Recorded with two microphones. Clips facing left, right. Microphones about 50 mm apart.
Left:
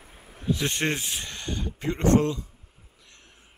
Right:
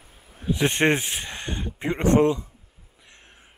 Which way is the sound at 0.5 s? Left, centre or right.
Right.